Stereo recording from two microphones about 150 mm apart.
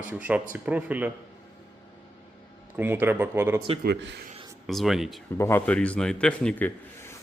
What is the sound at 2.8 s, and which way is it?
Speech, 15° right (ahead or behind).